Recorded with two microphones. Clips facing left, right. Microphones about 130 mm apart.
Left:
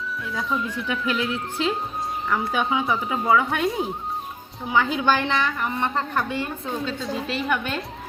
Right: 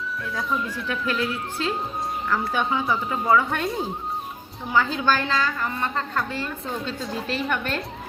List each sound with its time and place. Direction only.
0.3 s a woman's voice: centre (ahead or behind)
0.9 s speech: 15° left (ahead or behind)
4.7 s a woman's voice: 15° left (ahead or behind)
7.0 s a woman's voice: centre (ahead or behind)